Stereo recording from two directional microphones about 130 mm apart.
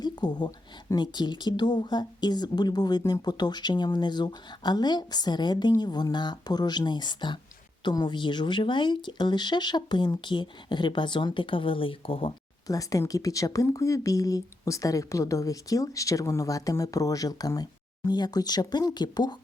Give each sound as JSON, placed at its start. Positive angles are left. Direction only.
{"t": 0.0, "sound": "speech", "side_deg": 35}
{"t": 12.6, "sound": "speech", "side_deg": 25}